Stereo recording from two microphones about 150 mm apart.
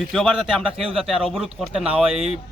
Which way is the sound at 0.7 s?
40° right (ahead or behind).